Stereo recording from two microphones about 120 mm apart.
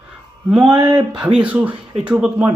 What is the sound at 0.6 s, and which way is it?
Speech, 35° right (ahead or behind).